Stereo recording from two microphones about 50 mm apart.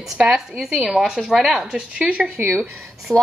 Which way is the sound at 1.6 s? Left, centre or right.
Centre.